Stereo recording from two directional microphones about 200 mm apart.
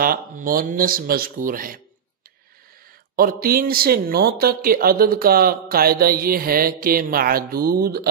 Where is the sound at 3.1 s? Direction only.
50° right (ahead or behind).